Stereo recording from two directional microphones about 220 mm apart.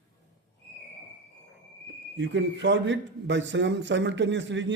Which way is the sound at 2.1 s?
55° right (ahead or behind).